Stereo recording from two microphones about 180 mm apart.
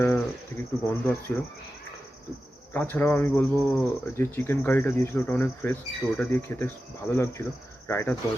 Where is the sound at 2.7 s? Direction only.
10° left (ahead or behind).